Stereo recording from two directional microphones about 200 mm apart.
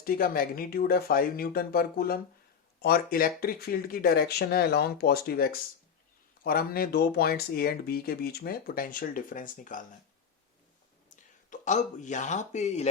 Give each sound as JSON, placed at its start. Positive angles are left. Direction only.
{"t": 0.0, "sound": "speech", "side_deg": 45}
{"t": 11.1, "sound": "speech", "side_deg": 40}